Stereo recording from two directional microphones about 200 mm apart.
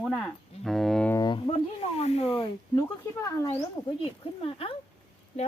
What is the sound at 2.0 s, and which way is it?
Speech, 30° left (ahead or behind).